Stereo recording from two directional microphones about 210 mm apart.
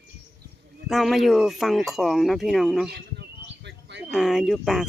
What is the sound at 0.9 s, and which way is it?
Speech, centre (ahead or behind).